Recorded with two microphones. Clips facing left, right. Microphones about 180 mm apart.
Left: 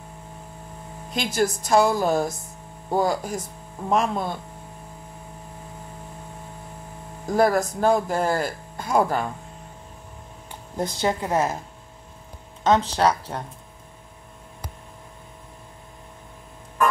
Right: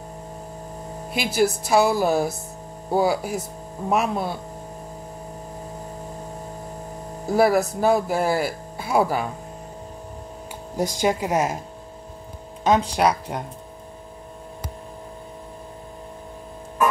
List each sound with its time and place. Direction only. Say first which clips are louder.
1.1 s speech: right 2 dB; 5° right (ahead or behind)
7.2 s speech: right 2 dB; 5° right (ahead or behind)
10.8 s speech: right 2 dB; 10° right (ahead or behind)
12.6 s speech: even; 10° right (ahead or behind)